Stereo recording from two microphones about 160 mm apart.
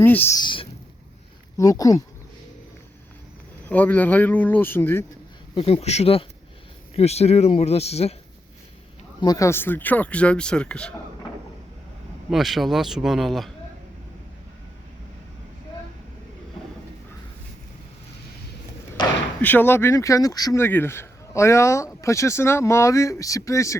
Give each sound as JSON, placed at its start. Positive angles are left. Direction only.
{"t": 0.0, "sound": "speech", "side_deg": 10}
{"t": 0.3, "sound": "speech", "side_deg": 30}
{"t": 3.7, "sound": "speech", "side_deg": 10}
{"t": 5.5, "sound": "speech", "side_deg": 40}
{"t": 9.2, "sound": "speech", "side_deg": 20}
{"t": 12.3, "sound": "speech", "side_deg": 0}
{"t": 19.4, "sound": "speech", "side_deg": 10}